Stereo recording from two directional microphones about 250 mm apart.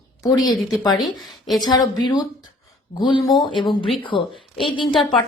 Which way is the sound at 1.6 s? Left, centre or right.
Centre.